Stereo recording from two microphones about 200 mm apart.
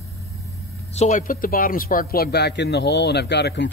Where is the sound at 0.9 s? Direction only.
35° left (ahead or behind).